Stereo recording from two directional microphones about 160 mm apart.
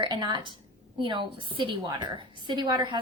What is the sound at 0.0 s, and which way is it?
A woman's voice, 25° right (ahead or behind).